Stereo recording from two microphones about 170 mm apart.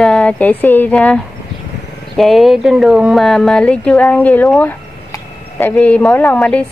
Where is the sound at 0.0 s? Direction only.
5° left (ahead or behind).